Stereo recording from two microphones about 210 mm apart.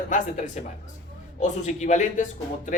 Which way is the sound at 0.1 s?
35° left (ahead or behind).